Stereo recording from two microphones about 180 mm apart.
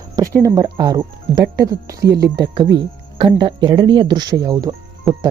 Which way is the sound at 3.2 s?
25° right (ahead or behind).